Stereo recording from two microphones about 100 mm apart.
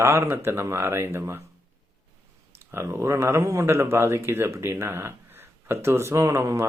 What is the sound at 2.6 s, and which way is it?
Speech, 25° right (ahead or behind).